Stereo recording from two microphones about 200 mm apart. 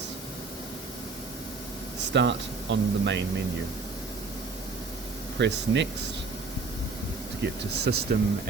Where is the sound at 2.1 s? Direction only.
65° right (ahead or behind).